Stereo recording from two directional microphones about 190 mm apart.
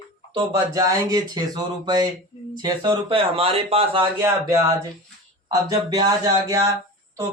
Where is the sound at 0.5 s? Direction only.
20° right (ahead or behind).